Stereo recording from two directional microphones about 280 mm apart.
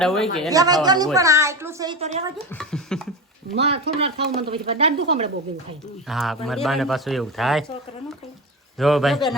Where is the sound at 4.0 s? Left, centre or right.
Right.